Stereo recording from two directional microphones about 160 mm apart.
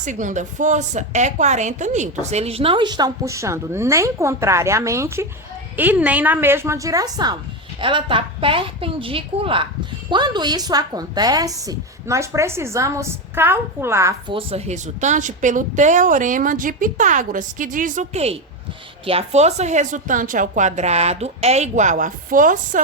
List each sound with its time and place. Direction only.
0.0 s a woman's voice: 50° right (ahead or behind); by 14.2 s 15° right (ahead or behind)
14.3 s a woman's voice: 35° right (ahead or behind); by 22.8 s 55° right (ahead or behind)